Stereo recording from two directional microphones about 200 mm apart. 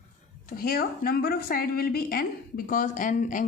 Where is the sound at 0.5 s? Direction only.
45° left (ahead or behind).